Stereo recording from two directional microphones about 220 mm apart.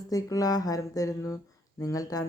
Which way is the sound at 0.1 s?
15° left (ahead or behind).